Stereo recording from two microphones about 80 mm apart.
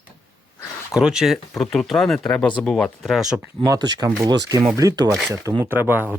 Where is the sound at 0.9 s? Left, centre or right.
Centre.